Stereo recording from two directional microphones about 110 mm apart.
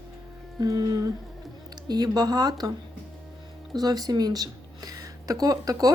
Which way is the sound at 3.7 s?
35° right (ahead or behind).